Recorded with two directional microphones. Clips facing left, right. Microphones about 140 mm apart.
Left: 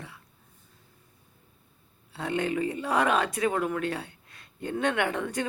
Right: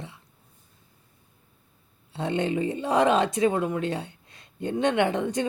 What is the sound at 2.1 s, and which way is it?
Speech, 25° right (ahead or behind).